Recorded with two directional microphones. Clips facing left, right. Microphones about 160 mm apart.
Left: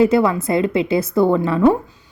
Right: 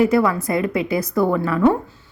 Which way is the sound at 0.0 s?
25° left (ahead or behind).